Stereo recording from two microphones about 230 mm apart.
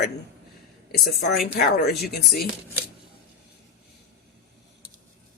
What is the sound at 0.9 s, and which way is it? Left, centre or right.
Speech, left.